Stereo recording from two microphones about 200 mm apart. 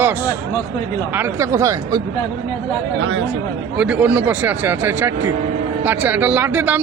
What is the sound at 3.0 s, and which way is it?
Speech, 70° right (ahead or behind).